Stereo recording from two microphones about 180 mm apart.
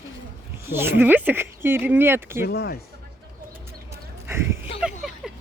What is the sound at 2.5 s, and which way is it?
Speech, 65° left (ahead or behind).